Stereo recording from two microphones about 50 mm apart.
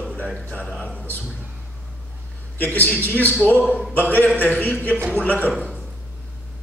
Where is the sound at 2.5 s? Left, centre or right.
Left.